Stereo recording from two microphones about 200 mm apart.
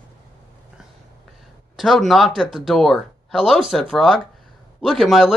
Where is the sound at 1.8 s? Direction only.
Centre (ahead or behind).